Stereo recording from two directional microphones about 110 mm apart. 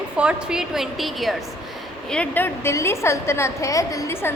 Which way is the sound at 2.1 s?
15° left (ahead or behind).